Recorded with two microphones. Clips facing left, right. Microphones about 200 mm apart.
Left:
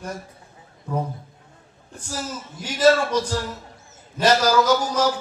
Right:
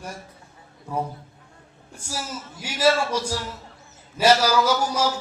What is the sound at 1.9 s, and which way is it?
A man's voice, 10° right (ahead or behind).